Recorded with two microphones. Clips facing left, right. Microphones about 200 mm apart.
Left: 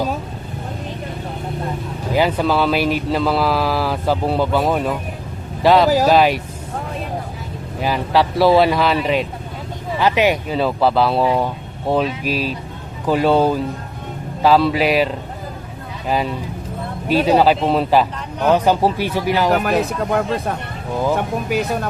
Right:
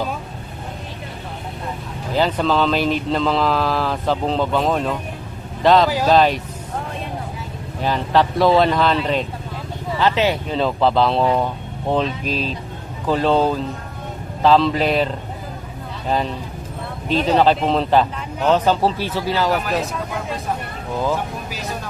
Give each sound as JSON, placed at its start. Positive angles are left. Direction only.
{"t": 2.1, "sound": "speech", "side_deg": 10}
{"t": 7.8, "sound": "speech", "side_deg": 10}
{"t": 21.2, "sound": "speech", "side_deg": 60}